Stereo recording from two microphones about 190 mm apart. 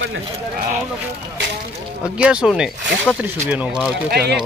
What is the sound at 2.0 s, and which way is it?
A man's voice, 5° right (ahead or behind).